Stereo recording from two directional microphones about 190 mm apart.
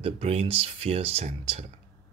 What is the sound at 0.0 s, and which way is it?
Speech, 35° right (ahead or behind).